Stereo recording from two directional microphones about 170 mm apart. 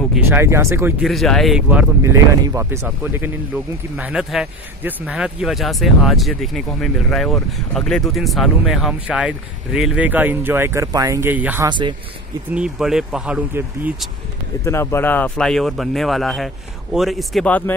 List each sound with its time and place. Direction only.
0.3 s speech: 15° right (ahead or behind)
1.0 s speech: centre (ahead or behind)
11.6 s speech: 25° right (ahead or behind)
12.5 s speech: 5° right (ahead or behind)
14.6 s speech: 15° left (ahead or behind)